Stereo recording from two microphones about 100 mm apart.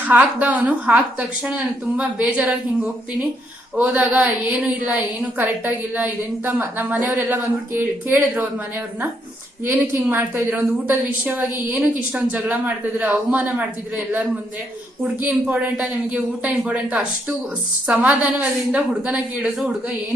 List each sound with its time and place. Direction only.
0.0 s a woman's voice: 15° right (ahead or behind)
9.6 s a woman's voice: 20° right (ahead or behind)